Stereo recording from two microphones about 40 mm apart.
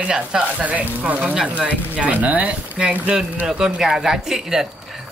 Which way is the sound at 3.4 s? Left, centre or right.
Centre.